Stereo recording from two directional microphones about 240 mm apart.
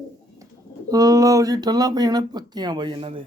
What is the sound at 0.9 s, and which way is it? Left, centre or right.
A man's voice, centre.